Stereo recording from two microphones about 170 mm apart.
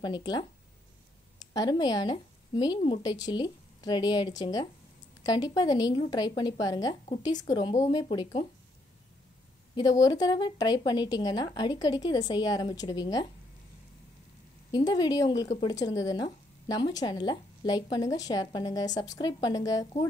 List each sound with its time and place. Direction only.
0.0 s a woman's voice: 25° left (ahead or behind)
1.5 s a woman's voice: 25° left (ahead or behind)
10.0 s a woman's voice: 25° left (ahead or behind)
14.7 s a woman's voice: 25° left (ahead or behind)